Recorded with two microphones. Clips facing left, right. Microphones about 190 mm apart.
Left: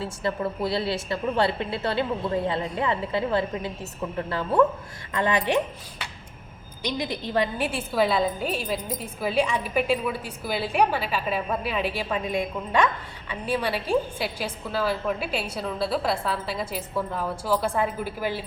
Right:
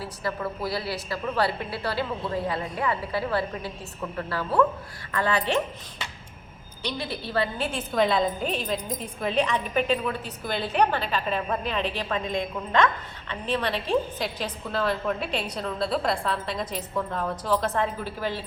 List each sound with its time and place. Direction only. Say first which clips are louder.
0.0 s a woman's voice: left 3 dB; 25° left (ahead or behind)
6.8 s a woman's voice: left 3 dB; 15° left (ahead or behind)